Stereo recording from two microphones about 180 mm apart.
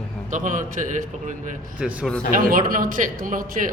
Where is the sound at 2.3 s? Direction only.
50° right (ahead or behind).